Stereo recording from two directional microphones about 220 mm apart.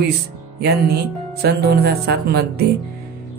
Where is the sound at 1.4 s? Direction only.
45° right (ahead or behind).